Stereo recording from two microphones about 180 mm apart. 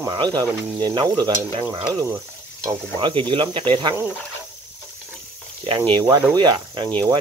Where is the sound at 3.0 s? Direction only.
30° right (ahead or behind).